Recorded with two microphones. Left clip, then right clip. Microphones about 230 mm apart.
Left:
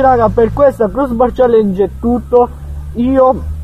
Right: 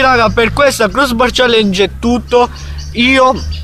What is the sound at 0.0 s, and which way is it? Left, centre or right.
Speech, centre.